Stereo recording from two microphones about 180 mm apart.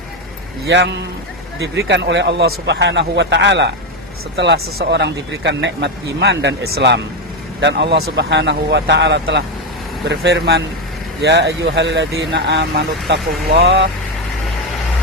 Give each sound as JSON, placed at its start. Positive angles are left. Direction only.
{"t": 0.7, "sound": "speech", "side_deg": -75}